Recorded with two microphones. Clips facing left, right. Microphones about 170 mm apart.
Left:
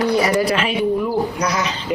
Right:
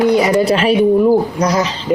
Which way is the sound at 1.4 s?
30° right (ahead or behind).